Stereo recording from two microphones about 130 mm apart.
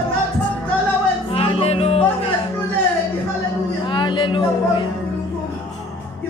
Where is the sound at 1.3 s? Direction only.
45° left (ahead or behind).